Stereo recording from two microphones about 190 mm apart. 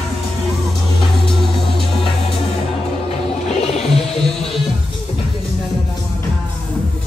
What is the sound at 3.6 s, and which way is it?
Music, 35° left (ahead or behind).